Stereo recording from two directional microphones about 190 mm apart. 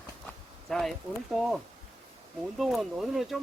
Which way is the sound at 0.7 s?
Centre (ahead or behind).